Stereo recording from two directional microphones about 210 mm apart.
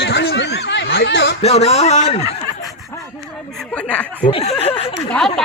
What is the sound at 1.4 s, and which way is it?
Speech, 30° left (ahead or behind).